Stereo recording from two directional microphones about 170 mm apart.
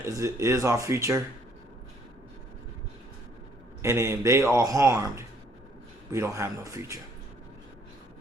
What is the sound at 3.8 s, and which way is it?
Speech, 15° right (ahead or behind).